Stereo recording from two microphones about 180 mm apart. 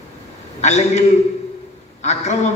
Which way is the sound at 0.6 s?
40° left (ahead or behind).